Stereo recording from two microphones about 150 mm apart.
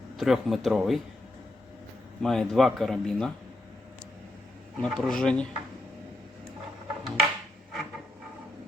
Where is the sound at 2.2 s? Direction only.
Centre (ahead or behind).